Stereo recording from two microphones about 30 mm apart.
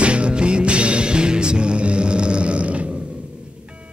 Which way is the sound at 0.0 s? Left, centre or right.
Right.